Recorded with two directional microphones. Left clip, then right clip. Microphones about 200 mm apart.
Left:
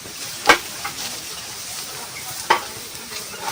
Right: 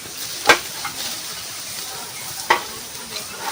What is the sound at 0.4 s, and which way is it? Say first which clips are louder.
Stir: even; 10° right (ahead or behind).